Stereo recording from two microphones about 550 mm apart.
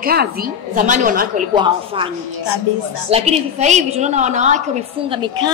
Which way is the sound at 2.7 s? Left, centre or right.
Left.